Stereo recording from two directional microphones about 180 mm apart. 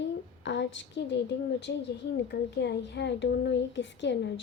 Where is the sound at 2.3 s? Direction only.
75° left (ahead or behind).